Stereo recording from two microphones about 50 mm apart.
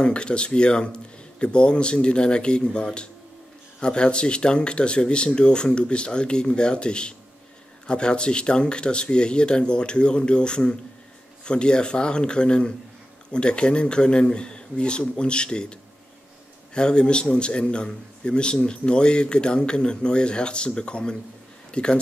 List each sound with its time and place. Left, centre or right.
0.0 s a man's voice: centre